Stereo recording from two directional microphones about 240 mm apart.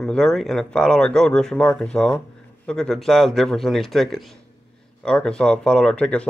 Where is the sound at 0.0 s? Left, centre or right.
Centre.